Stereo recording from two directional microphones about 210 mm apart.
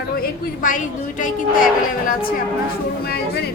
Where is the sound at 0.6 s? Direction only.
40° left (ahead or behind).